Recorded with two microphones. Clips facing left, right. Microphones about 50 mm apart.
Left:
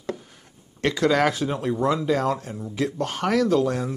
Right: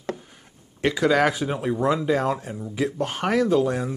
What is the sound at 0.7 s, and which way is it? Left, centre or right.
Speech, centre.